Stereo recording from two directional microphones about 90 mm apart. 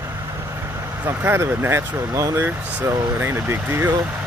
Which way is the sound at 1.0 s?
30° right (ahead or behind).